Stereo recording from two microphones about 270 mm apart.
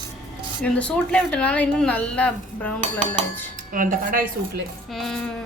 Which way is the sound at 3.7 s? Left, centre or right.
Right.